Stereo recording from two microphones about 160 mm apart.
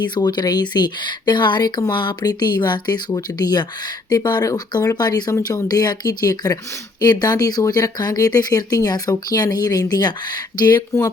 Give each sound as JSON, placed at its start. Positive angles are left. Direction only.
{"t": 0.0, "sound": "speech", "side_deg": 25}